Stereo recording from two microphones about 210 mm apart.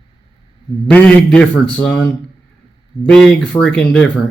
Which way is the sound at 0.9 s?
5° left (ahead or behind).